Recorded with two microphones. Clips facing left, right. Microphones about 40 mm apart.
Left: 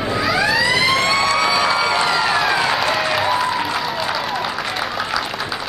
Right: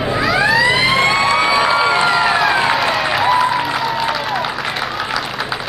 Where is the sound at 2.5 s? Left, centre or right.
Centre.